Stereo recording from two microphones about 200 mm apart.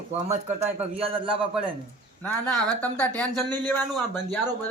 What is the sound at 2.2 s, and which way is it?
Speech, 10° left (ahead or behind).